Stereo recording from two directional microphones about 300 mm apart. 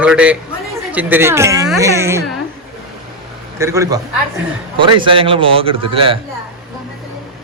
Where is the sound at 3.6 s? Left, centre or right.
Centre.